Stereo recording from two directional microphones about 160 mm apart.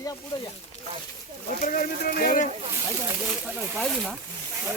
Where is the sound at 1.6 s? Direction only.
65° left (ahead or behind).